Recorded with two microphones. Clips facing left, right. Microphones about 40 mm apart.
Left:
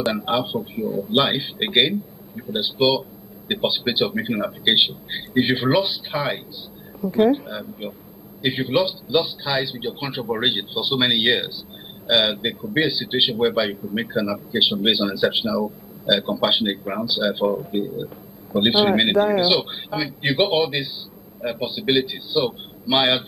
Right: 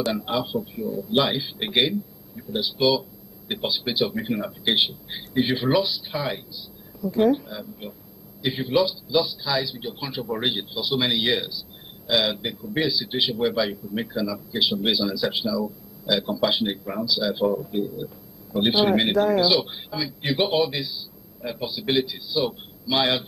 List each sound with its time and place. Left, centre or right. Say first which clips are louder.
0.0 s a man's voice: left 3 dB; left